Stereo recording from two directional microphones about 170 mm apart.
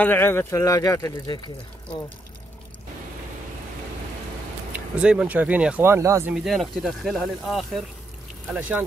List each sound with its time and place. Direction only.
0.0 s speech: 10° left (ahead or behind)
4.7 s speech: 5° right (ahead or behind)
6.3 s speech: centre (ahead or behind)